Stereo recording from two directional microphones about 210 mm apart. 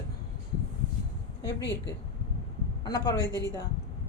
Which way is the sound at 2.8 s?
20° left (ahead or behind).